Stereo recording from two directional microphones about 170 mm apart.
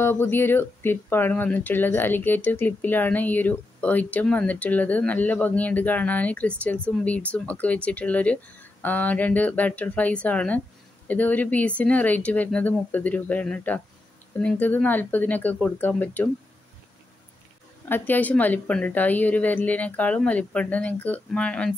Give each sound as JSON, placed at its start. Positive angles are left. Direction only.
{"t": 0.0, "sound": "speech", "side_deg": 15}
{"t": 17.8, "sound": "speech", "side_deg": 10}